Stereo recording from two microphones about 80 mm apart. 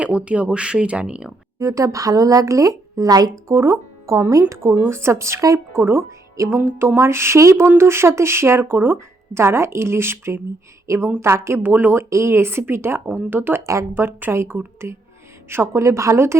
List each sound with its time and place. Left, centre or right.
0.0 s speech: centre
1.5 s speech: right
5.7 s a woman's voice: right